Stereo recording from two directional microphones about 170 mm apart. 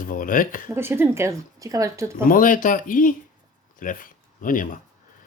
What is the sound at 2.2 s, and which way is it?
Speech, 55° left (ahead or behind).